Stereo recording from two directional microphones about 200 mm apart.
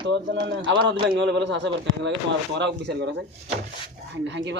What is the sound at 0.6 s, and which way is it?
Speech, 60° right (ahead or behind).